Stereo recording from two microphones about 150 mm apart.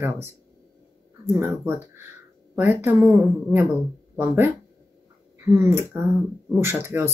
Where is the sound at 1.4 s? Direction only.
15° right (ahead or behind).